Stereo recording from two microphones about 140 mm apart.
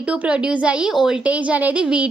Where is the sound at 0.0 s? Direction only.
10° right (ahead or behind).